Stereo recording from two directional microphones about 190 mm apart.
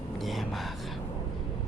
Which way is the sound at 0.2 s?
Centre (ahead or behind).